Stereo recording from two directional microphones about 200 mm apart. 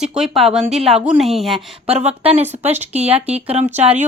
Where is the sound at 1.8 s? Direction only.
30° right (ahead or behind).